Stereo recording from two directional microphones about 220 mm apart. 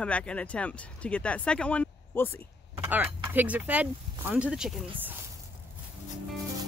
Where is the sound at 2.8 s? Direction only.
10° right (ahead or behind).